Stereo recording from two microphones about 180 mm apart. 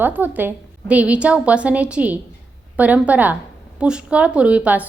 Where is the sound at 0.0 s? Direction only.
10° right (ahead or behind).